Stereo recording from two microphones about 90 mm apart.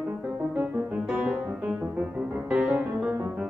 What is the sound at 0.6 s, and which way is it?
Music, 15° right (ahead or behind).